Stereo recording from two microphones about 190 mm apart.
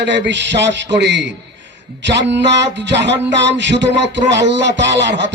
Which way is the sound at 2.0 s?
65° right (ahead or behind).